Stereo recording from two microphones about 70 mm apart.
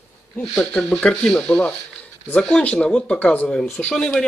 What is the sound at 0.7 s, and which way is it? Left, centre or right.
Speech, centre.